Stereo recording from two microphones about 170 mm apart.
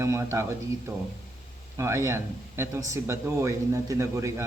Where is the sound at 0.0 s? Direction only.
15° right (ahead or behind).